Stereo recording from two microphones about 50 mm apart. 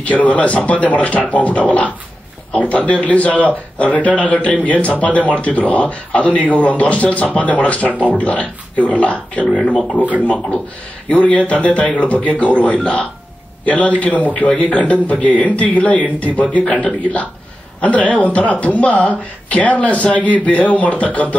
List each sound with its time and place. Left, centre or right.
0.0 s speech: left